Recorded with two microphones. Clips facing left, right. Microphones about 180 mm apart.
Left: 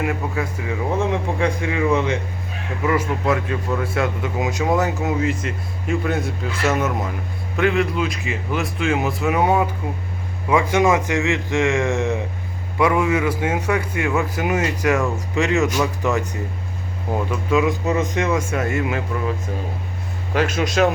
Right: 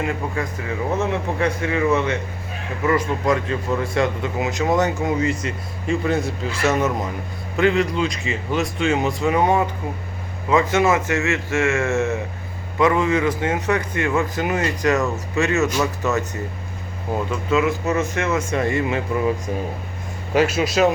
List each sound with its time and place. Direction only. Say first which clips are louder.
0.0 s speech: left 1 dB; 10° left (ahead or behind)
17.5 s speech: left 1 dB; 15° left (ahead or behind)
20.3 s speech: right 2 dB; 5° right (ahead or behind)